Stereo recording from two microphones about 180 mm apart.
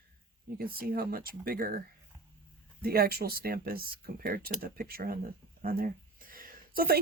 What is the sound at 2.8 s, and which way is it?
Speech, 55° right (ahead or behind).